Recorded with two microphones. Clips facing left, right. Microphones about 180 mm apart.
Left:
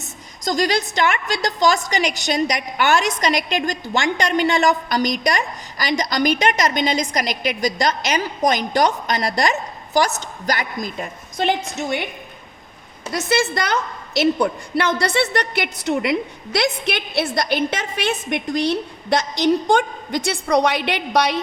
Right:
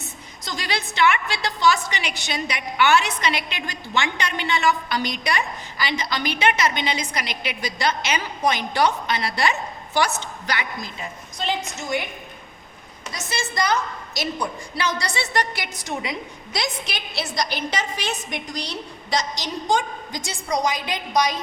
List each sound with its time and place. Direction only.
0.4 s a woman's voice: 45° left (ahead or behind)
10.9 s a woman's voice: 55° left (ahead or behind)
13.1 s a woman's voice: 60° left (ahead or behind)